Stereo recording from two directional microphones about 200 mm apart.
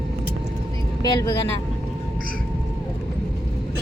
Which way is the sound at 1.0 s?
20° left (ahead or behind).